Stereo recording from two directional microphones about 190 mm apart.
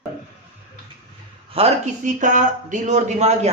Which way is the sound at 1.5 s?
35° right (ahead or behind).